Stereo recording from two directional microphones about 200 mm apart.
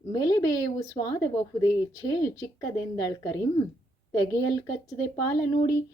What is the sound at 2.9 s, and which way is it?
Speech, 15° left (ahead or behind).